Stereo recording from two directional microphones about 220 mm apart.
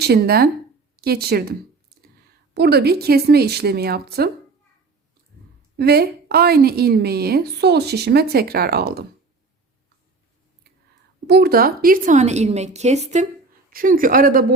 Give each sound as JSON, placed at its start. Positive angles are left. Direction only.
{"t": 0.0, "sound": "a woman's voice", "side_deg": -45}
{"t": 5.7, "sound": "a woman's voice", "side_deg": -45}
{"t": 11.3, "sound": "a woman's voice", "side_deg": -45}